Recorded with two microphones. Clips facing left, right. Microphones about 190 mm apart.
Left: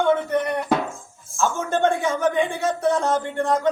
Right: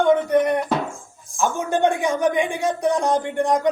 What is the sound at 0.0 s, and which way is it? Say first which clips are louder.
Music: right 3 dB; 15° right (ahead or behind).